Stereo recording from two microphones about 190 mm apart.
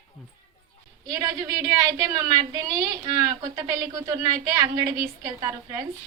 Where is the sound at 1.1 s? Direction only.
20° right (ahead or behind).